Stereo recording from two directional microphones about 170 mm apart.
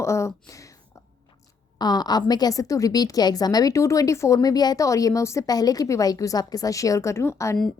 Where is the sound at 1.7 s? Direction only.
25° left (ahead or behind).